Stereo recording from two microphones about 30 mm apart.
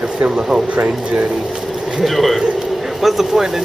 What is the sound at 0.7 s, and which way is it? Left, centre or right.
Speech, right.